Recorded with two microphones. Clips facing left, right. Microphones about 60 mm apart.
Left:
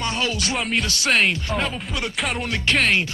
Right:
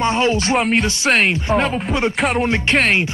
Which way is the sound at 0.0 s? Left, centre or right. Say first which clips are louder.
Right 8 dB; right.